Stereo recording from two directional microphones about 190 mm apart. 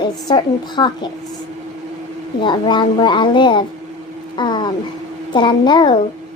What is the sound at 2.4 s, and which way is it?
A woman's voice, 25° left (ahead or behind).